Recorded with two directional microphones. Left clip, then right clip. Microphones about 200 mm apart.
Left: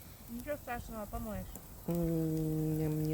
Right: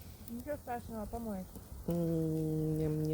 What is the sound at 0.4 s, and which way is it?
Speech, 30° left (ahead or behind).